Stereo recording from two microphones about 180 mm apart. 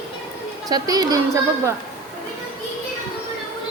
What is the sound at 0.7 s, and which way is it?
Speech, 20° right (ahead or behind).